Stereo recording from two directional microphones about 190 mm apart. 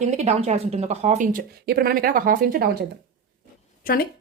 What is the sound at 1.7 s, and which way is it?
Speech, 50° right (ahead or behind).